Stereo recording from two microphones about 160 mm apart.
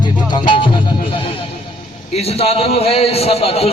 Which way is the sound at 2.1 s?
35° left (ahead or behind).